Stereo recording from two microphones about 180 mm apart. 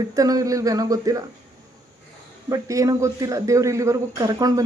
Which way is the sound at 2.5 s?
20° right (ahead or behind).